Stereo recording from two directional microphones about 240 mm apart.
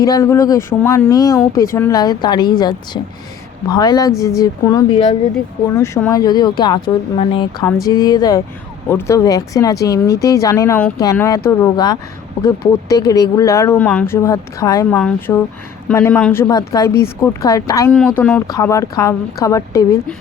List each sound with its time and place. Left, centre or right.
0.0 s a woman's voice: centre